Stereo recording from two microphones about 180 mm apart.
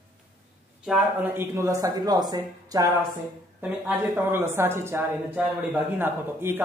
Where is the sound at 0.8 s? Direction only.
5° right (ahead or behind).